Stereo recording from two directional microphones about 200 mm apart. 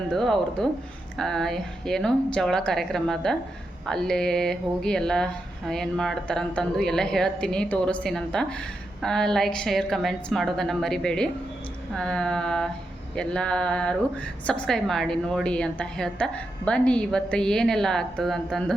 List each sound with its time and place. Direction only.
0.1 s speech: centre (ahead or behind)